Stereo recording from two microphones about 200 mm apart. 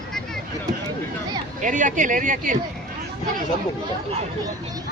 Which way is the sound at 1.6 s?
40° right (ahead or behind).